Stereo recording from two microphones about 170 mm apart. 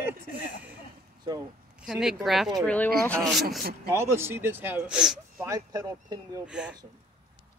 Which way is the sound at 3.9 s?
15° right (ahead or behind).